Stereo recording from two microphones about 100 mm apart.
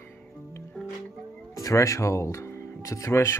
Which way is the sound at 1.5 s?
35° left (ahead or behind).